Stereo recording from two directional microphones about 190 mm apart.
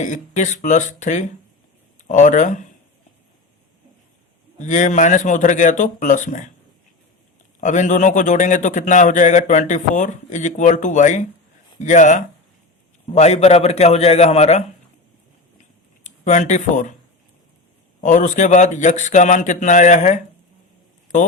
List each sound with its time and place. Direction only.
0.0 s a man's voice: 40° left (ahead or behind)
4.6 s a man's voice: 40° left (ahead or behind)
7.6 s a man's voice: 40° left (ahead or behind)
16.0 s speech: 40° left (ahead or behind)
18.0 s a man's voice: 40° left (ahead or behind)